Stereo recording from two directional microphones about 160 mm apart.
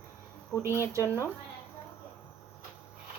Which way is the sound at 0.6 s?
15° right (ahead or behind).